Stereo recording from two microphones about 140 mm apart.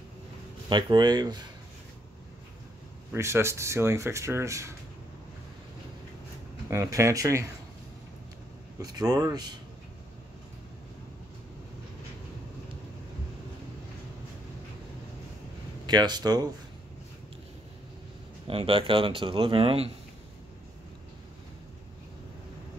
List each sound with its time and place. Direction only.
0.7 s speech: 30° right (ahead or behind)
3.1 s speech: 20° right (ahead or behind)
6.7 s speech: 20° right (ahead or behind)
8.7 s speech: 25° right (ahead or behind)
15.9 s speech: 30° right (ahead or behind)
18.5 s speech: 40° right (ahead or behind)